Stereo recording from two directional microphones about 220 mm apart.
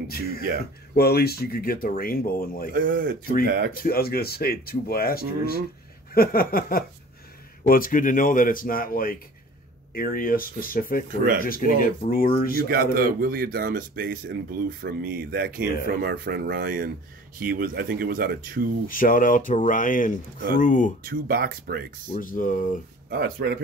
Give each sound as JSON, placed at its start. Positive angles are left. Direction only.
{"t": 0.9, "sound": "speech", "side_deg": 45}
{"t": 2.8, "sound": "speech", "side_deg": -40}
{"t": 3.8, "sound": "speech", "side_deg": 45}
{"t": 12.6, "sound": "speech", "side_deg": -40}
{"t": 18.9, "sound": "speech", "side_deg": 40}
{"t": 21.0, "sound": "speech", "side_deg": -45}
{"t": 22.2, "sound": "speech", "side_deg": 40}
{"t": 23.0, "sound": "speech", "side_deg": -45}